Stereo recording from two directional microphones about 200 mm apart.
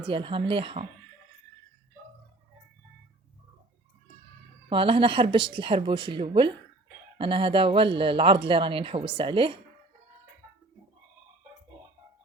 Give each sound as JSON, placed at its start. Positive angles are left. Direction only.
{"t": 0.0, "sound": "speech", "side_deg": -25}
{"t": 4.7, "sound": "speech", "side_deg": -25}